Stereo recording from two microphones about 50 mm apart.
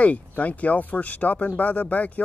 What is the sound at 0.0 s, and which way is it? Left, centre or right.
Speech, left.